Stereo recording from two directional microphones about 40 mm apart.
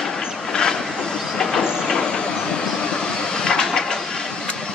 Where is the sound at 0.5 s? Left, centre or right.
Centre.